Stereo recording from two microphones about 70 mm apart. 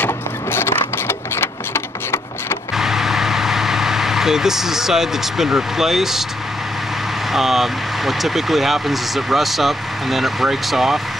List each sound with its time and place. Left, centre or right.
0.0 s a sound: left
2.7 s vehicle: centre
7.3 s speech: centre